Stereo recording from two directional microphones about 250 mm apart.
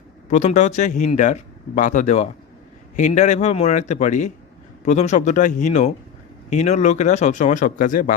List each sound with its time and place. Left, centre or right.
0.3 s speech: left